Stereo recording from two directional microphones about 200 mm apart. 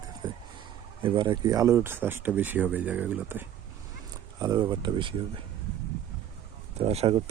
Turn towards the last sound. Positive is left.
turn(degrees=-30)  # may be behind; listen again after turning